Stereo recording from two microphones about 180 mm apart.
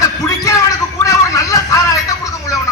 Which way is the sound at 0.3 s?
15° left (ahead or behind).